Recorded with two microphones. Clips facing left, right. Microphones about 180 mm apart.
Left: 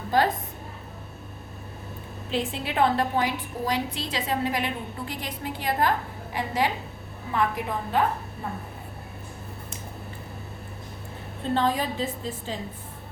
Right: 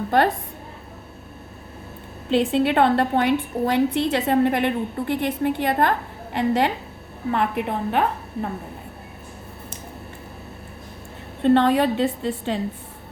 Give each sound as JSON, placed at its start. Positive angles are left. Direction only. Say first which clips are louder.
{"t": 0.1, "sound": "a woman's voice", "louder": "right 4 dB", "side_deg": -60}
{"t": 2.3, "sound": "a woman's voice", "louder": "right 10 dB", "side_deg": -65}
{"t": 11.4, "sound": "a woman's voice", "louder": "right 8 dB", "side_deg": -65}